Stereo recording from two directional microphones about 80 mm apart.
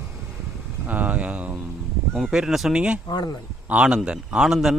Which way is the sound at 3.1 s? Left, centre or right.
Left.